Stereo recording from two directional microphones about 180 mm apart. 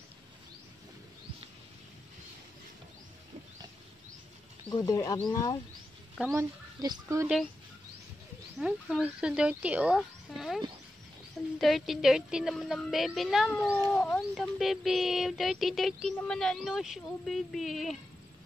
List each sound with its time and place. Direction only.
4.6 s speech: 20° left (ahead or behind)
6.3 s speech: 20° right (ahead or behind)
8.5 s a sound: centre (ahead or behind)